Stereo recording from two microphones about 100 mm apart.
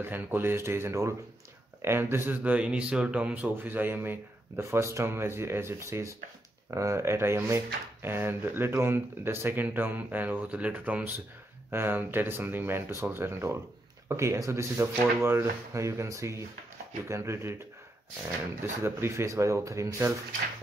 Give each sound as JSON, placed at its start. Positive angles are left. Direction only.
{"t": 0.0, "sound": "speech", "side_deg": -20}
{"t": 18.8, "sound": "speech", "side_deg": -25}